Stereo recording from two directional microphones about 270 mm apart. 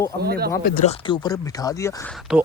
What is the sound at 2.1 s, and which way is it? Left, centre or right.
Speech, centre.